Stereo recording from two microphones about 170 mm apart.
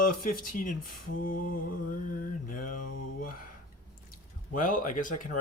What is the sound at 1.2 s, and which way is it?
Mantra, 55° left (ahead or behind).